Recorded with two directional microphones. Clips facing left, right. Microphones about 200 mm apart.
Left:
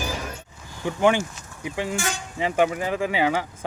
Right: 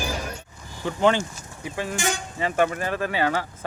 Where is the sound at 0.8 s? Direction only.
10° left (ahead or behind).